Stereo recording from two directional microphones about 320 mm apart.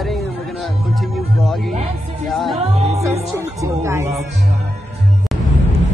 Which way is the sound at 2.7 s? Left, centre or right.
Centre.